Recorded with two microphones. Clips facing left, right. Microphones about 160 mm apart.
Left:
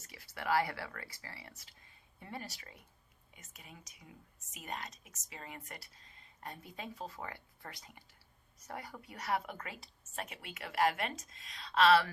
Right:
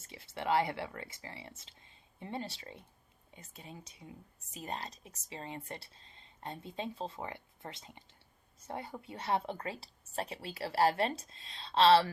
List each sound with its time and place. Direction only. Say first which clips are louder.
0.0 s speech: right 3 dB; 25° right (ahead or behind)